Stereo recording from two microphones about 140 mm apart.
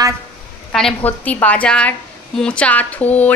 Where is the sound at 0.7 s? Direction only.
5° left (ahead or behind).